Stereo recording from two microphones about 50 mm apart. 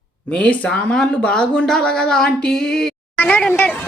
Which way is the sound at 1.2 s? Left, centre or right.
Centre.